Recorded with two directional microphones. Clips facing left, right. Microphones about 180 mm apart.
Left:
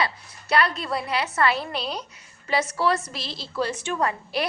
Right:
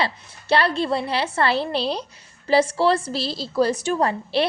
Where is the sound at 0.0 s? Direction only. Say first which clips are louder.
Right 2 dB; 30° right (ahead or behind).